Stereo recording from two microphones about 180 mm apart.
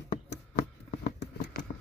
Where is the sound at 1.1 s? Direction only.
45° left (ahead or behind).